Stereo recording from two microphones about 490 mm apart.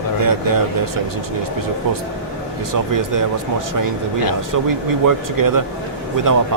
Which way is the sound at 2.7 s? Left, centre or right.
Right.